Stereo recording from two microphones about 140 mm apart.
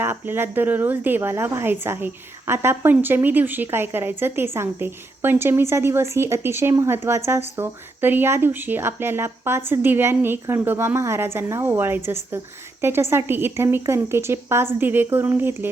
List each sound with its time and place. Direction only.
0.0 s speech: 15° right (ahead or behind)